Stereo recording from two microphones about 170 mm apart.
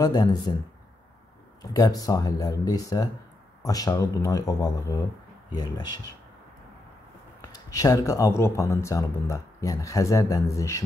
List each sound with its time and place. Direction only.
0.0 s speech: 20° left (ahead or behind)
1.6 s speech: 20° left (ahead or behind)
7.4 s speech: 20° left (ahead or behind)